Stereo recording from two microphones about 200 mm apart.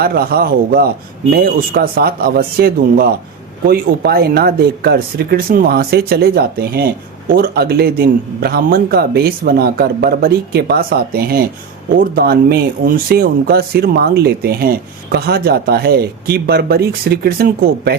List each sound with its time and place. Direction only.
0.0 s speech: 50° right (ahead or behind)